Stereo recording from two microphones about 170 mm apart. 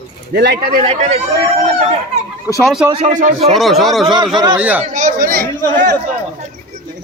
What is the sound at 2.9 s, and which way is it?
Speech, 45° right (ahead or behind).